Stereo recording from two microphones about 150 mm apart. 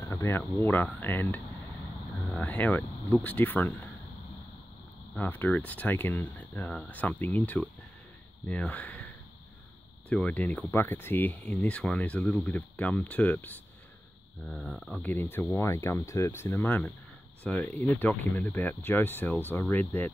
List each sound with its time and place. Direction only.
0.0 s a sound: 20° left (ahead or behind)
0.6 s speech: 10° left (ahead or behind)
5.1 s speech: 10° left (ahead or behind)